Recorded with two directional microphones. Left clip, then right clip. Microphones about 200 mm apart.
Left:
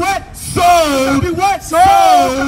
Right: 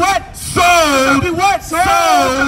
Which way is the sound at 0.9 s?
20° right (ahead or behind).